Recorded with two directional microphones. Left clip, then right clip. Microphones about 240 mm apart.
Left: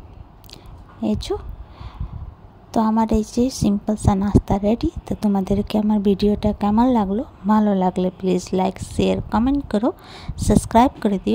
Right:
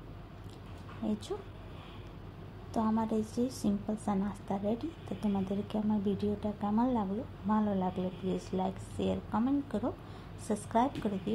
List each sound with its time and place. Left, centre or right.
1.0 s a woman's voice: left
2.7 s a woman's voice: left